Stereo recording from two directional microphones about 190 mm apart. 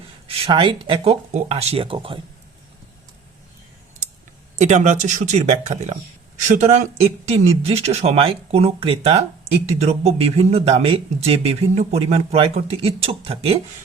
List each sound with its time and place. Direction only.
0.3 s speech: 30° right (ahead or behind)
4.6 s speech: 40° right (ahead or behind)
7.3 s speech: 30° right (ahead or behind)